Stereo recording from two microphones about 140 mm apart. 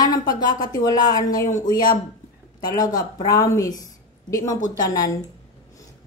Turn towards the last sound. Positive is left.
turn(degrees=25)  # may be behind; listen again after turning